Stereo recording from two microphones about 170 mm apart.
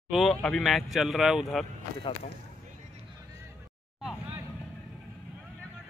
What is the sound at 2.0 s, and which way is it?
Speech, 30° left (ahead or behind).